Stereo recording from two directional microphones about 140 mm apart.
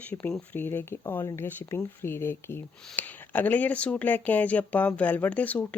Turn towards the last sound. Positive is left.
turn(degrees=10)  # may be behind; listen again after turning